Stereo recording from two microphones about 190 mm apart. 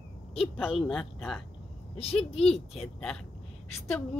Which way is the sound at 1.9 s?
30° left (ahead or behind).